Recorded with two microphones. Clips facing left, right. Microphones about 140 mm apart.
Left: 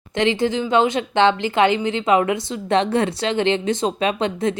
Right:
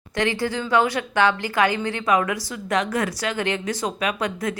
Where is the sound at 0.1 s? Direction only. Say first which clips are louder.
Left 4 dB; 20° left (ahead or behind).